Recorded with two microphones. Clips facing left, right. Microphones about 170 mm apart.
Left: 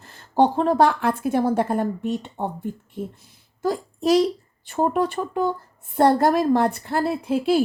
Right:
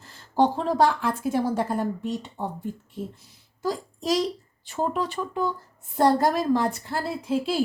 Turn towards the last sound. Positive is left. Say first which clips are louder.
# left 5 dB
turn(degrees=60)  # may be behind; listen again after turning